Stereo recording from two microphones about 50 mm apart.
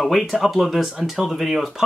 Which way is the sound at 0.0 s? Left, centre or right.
Centre.